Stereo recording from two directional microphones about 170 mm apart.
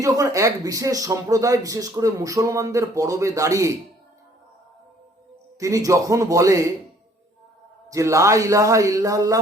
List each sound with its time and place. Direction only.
0.0 s speech: 20° right (ahead or behind)
5.5 s speech: 20° right (ahead or behind)
7.9 s speech: 20° right (ahead or behind)